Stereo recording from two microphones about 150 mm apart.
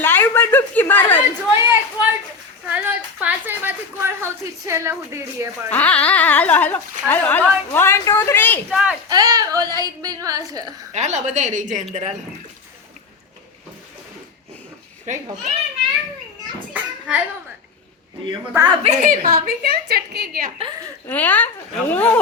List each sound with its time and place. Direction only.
0.0 s a woman's voice: 15° left (ahead or behind)
1.5 s a sound: 15° right (ahead or behind)
5.7 s speech: 10° left (ahead or behind)
8.7 s speech: 5° right (ahead or behind)
9.0 s a woman's voice: 25° right (ahead or behind)
10.9 s speech: 50° right (ahead or behind)
15.0 s speech: 55° right (ahead or behind)
16.4 s children playing: 25° right (ahead or behind)
16.7 s a sound: 10° right (ahead or behind)
18.5 s a woman's voice: 25° right (ahead or behind)
18.8 s a woman's voice: 55° right (ahead or behind); by 20.5 s 80° right
21.1 s speech: 10° left (ahead or behind)